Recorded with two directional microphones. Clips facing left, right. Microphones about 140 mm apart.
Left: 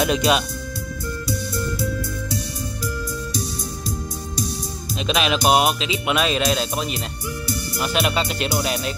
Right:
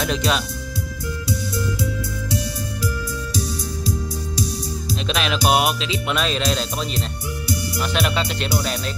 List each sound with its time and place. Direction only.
0.0 s speech: 15° left (ahead or behind)
5.0 s music: 5° left (ahead or behind)